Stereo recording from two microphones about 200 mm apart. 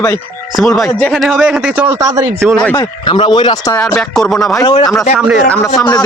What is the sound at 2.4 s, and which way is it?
Speech, centre (ahead or behind).